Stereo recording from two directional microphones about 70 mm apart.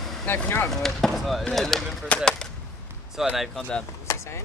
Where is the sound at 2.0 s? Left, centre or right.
Centre.